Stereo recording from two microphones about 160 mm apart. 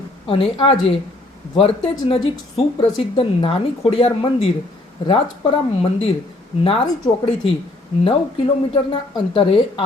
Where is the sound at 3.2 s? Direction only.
35° left (ahead or behind).